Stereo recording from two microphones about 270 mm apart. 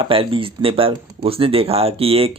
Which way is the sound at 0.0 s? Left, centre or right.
Centre.